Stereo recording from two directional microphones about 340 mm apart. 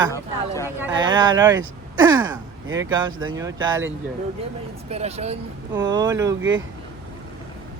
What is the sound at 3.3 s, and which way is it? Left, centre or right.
Speech, centre.